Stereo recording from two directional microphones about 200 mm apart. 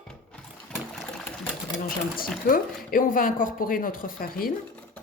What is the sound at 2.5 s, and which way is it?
Speech, 50° left (ahead or behind).